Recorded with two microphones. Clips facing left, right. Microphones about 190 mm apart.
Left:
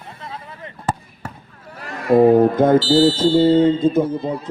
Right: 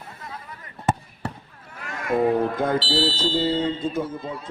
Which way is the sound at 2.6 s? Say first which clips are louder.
Left 10 dB; 45° left (ahead or behind).